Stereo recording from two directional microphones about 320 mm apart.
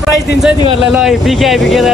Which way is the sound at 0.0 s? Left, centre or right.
Centre.